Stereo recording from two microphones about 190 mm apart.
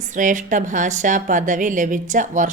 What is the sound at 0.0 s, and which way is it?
A woman's voice, 40° right (ahead or behind).